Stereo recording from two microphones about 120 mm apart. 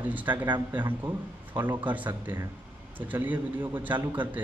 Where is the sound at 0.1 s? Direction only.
15° right (ahead or behind).